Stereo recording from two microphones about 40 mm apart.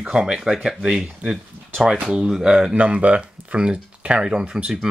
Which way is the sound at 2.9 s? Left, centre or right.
Right.